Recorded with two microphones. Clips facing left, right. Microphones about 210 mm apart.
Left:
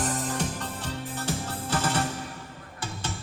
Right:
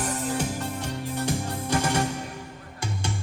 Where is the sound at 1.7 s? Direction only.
10° right (ahead or behind).